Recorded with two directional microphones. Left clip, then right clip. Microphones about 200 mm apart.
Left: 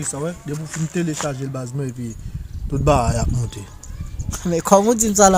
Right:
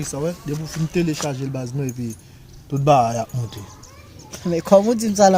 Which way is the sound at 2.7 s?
15° left (ahead or behind).